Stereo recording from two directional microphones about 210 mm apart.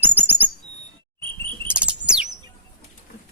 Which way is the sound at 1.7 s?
5° right (ahead or behind).